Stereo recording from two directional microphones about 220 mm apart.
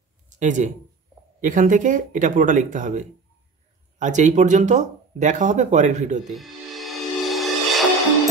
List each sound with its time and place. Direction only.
0.4 s speech: 35° right (ahead or behind)
6.3 s music: centre (ahead or behind)